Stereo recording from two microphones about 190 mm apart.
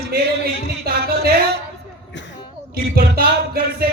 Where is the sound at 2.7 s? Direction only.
50° right (ahead or behind).